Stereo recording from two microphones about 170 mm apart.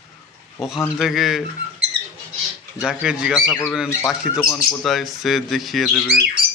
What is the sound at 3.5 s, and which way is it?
Speech, 15° left (ahead or behind).